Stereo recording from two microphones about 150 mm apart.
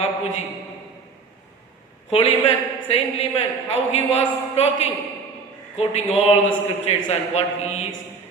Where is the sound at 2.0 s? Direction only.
40° left (ahead or behind).